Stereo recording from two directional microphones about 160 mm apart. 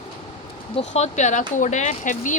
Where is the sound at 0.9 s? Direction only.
45° left (ahead or behind).